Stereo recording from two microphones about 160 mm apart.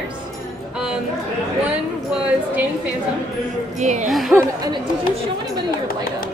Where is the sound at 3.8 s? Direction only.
50° right (ahead or behind).